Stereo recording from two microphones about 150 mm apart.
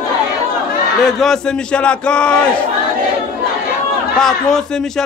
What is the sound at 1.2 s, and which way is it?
A man's voice, 5° left (ahead or behind).